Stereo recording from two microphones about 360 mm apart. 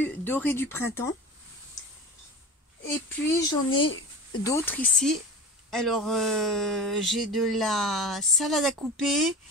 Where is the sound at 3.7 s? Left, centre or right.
Left.